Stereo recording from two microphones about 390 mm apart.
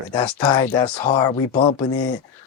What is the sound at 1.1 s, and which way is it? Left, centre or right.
Speech, centre.